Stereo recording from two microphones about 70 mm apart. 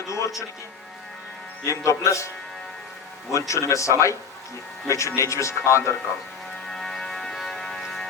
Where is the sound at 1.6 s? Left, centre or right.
Left.